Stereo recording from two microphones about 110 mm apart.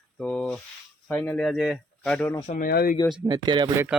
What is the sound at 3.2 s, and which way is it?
Speech, 45° right (ahead or behind).